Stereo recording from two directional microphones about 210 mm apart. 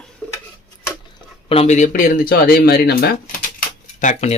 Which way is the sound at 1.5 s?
30° left (ahead or behind).